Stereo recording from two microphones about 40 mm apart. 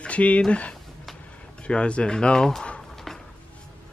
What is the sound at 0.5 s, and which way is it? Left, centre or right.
Speech, left.